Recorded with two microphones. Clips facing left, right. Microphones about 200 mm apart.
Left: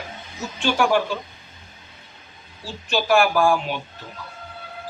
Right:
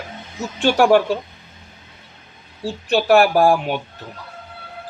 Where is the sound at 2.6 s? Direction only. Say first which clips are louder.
Right 6 dB; 60° right (ahead or behind).